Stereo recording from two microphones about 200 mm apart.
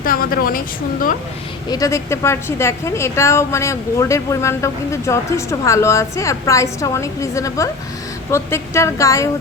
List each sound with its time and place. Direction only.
0.0 s a woman's voice: 45° left (ahead or behind)
1.7 s a woman's voice: 15° left (ahead or behind)